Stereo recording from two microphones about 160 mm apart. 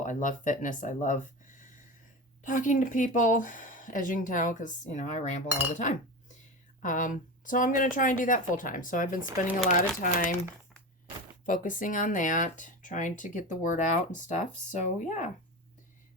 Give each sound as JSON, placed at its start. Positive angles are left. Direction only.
{"t": 0.0, "sound": "speech", "side_deg": 55}
{"t": 11.4, "sound": "speech", "side_deg": 55}